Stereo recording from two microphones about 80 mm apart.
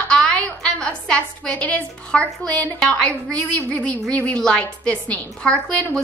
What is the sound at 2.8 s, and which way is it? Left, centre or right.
A woman's voice, centre.